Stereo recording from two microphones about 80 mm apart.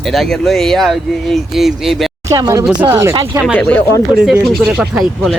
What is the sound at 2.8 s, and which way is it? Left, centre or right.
Speech, right.